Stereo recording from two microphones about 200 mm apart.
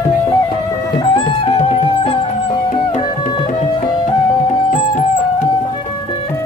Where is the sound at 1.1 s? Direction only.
25° left (ahead or behind).